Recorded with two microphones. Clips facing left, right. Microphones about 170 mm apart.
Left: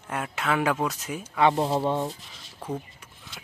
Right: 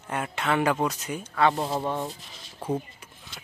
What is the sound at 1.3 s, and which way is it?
Speech, 15° left (ahead or behind).